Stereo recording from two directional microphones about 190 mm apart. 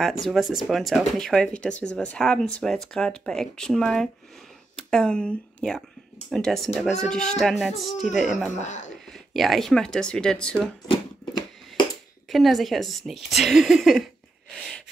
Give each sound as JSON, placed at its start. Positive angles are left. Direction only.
{"t": 0.0, "sound": "speech", "side_deg": 0}
{"t": 8.5, "sound": "speech", "side_deg": 40}
{"t": 9.0, "sound": "speech", "side_deg": 0}
{"t": 10.9, "sound": "a sound", "side_deg": 25}
{"t": 12.3, "sound": "speech", "side_deg": 0}
{"t": 14.5, "sound": "a sound", "side_deg": 0}